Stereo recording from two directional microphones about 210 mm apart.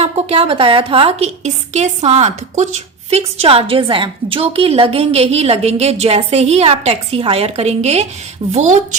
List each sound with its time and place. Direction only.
0.0 s a woman's voice: 25° right (ahead or behind)